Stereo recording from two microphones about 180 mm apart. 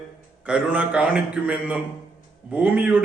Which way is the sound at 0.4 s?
5° right (ahead or behind).